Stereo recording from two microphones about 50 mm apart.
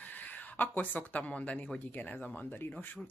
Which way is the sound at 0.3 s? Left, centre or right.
Left.